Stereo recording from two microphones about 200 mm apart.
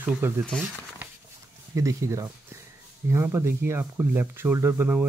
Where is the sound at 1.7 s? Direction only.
15° right (ahead or behind).